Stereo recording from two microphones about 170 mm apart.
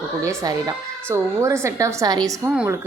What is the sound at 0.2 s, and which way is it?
A woman's voice, 20° right (ahead or behind).